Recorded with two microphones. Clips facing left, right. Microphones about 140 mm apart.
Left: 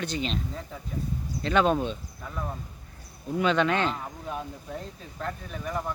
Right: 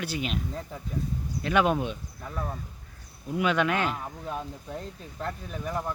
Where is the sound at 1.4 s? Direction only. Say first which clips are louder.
Left 1 dB; 10° right (ahead or behind).